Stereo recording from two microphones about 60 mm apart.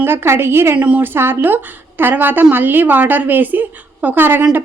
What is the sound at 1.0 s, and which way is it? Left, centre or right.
A woman's voice, right.